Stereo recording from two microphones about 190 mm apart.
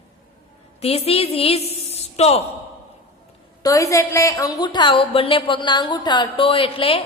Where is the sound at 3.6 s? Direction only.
15° left (ahead or behind).